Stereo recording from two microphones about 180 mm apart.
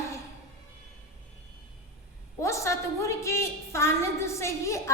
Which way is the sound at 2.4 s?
15° left (ahead or behind).